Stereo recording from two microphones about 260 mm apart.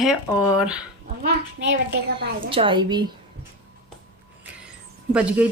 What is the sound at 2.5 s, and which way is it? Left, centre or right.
Speech, centre.